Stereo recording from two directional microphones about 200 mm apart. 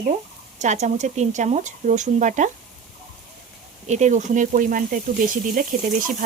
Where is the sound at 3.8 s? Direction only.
35° right (ahead or behind).